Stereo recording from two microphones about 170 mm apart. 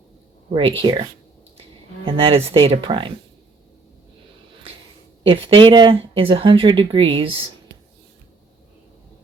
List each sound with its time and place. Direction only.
0.5 s speech: 30° right (ahead or behind)
2.0 s speech: 35° right (ahead or behind)
5.2 s speech: 30° right (ahead or behind)